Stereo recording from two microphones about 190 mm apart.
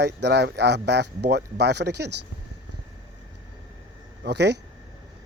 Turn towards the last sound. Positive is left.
turn(degrees=-60)  # may be behind; listen again after turning